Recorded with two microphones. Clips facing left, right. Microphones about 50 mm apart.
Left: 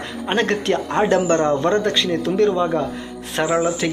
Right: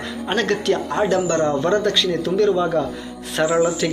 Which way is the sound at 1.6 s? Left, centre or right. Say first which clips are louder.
Even; centre.